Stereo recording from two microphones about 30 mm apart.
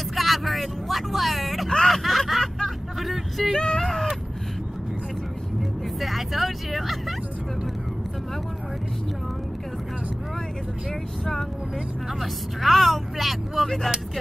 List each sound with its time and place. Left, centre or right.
0.1 s vehicle: centre
1.9 s hubbub: centre
3.5 s a sound: left
3.8 s a sound: centre
5.6 s vehicle: centre
12.2 s speech: centre